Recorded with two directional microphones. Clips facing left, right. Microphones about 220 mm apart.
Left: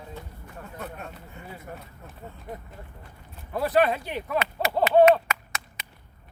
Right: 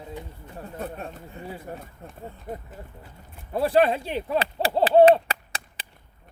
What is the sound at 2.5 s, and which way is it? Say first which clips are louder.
Speech: right 3 dB; 45° right (ahead or behind).